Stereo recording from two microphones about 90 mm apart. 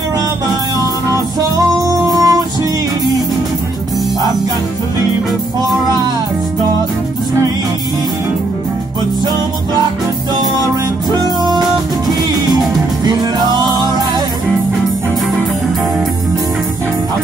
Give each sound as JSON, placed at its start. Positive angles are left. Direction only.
{"t": 1.9, "sound": "music", "side_deg": -40}
{"t": 11.1, "sound": "music", "side_deg": -55}
{"t": 13.0, "sound": "music", "side_deg": -55}